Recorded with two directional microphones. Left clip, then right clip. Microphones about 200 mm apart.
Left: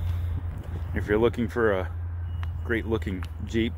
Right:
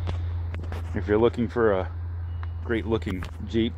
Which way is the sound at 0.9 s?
10° right (ahead or behind).